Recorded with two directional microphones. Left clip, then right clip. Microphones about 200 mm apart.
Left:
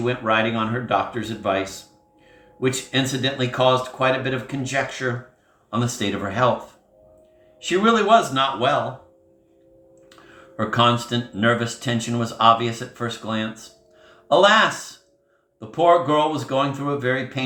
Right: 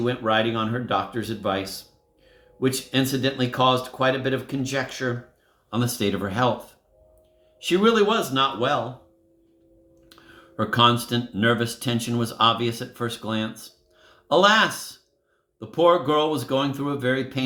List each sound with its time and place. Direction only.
0.0 s speech: 45° right (ahead or behind)
7.6 s speech: 45° right (ahead or behind)
10.6 s speech: 45° right (ahead or behind)